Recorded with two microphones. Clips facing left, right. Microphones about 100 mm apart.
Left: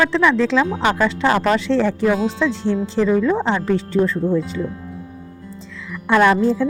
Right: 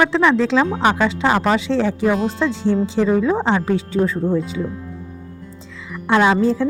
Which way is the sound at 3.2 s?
20° right (ahead or behind).